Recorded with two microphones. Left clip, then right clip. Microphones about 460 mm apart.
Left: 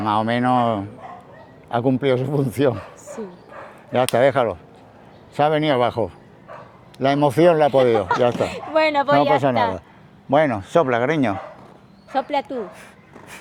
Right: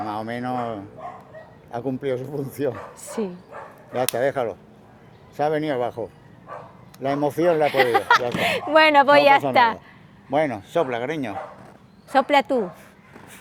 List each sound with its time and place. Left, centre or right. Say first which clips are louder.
0.1 s speech: left 9 dB; left
3.9 s speech: left 6 dB; left
7.8 s speech: left 1 dB; right
10.3 s speech: left 5 dB; left
12.1 s speech: right 4 dB; right